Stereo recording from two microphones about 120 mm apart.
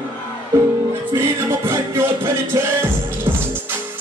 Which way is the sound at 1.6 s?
20° right (ahead or behind).